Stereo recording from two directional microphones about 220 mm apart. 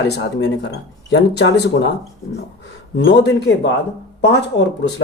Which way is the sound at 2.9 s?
50° left (ahead or behind).